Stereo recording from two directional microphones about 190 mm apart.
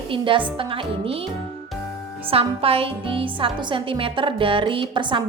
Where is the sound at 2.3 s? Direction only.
30° right (ahead or behind).